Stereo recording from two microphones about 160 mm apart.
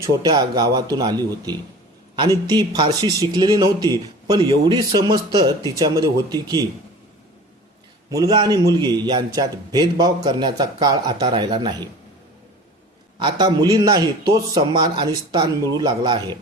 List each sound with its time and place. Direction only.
0.0 s a man's voice: 25° right (ahead or behind)
8.1 s a man's voice: 20° right (ahead or behind)
13.1 s a man's voice: 30° right (ahead or behind)